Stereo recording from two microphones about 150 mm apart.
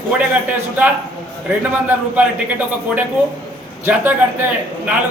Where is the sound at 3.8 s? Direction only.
15° right (ahead or behind).